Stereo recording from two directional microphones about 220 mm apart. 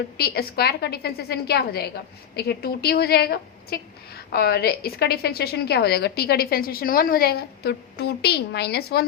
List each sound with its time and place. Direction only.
0.2 s a woman's voice: 45° left (ahead or behind)